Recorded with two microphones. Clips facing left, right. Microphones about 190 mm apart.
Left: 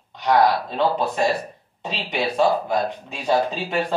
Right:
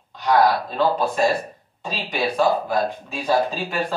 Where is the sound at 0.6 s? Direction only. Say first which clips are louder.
Right 1 dB; 20° left (ahead or behind).